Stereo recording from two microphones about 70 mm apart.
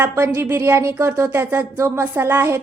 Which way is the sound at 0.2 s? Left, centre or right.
Right.